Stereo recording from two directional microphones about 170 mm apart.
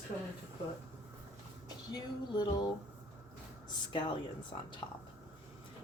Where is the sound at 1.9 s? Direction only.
25° left (ahead or behind).